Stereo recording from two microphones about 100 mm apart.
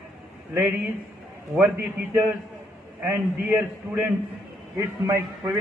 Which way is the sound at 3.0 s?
15° right (ahead or behind).